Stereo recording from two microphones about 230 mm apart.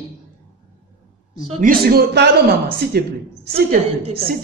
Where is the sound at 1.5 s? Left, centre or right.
Right.